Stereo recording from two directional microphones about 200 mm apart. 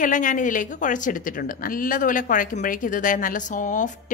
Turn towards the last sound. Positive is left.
turn(degrees=40)  # may be behind; listen again after turning